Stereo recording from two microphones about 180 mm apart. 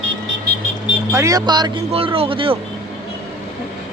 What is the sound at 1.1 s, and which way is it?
Speech, 15° right (ahead or behind).